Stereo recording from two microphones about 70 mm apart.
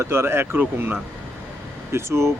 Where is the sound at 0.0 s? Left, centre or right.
Right.